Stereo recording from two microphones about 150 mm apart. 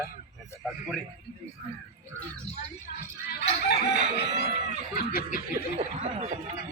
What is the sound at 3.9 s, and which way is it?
Chicken, 90° left.